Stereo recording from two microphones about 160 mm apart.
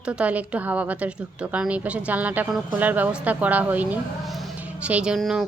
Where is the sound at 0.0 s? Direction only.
5° right (ahead or behind).